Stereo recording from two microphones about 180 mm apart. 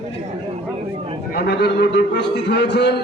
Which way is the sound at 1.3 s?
70° left (ahead or behind).